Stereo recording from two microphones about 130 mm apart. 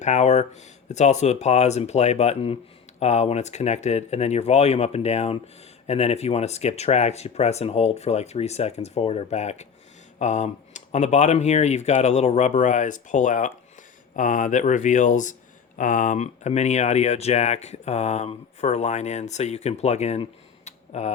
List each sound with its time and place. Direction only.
0.0 s speech: 65° left (ahead or behind)
20.7 s tick: 60° left (ahead or behind)